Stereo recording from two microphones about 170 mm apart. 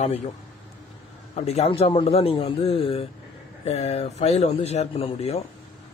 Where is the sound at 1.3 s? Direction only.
35° left (ahead or behind).